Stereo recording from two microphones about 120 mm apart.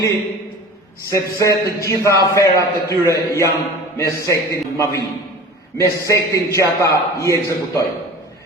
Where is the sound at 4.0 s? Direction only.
25° left (ahead or behind).